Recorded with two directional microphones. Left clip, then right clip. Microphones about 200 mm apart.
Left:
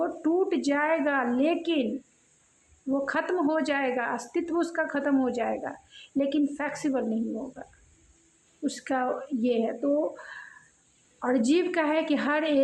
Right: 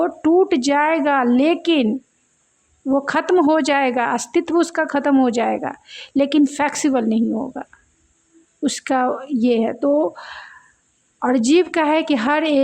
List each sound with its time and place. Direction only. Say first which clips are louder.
0.0 s speech: right 10 dB; 35° right (ahead or behind)
2.9 s speech: right 10 dB; 40° right (ahead or behind)